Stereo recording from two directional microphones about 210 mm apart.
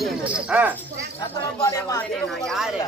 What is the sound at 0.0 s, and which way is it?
Cricket, 5° right (ahead or behind).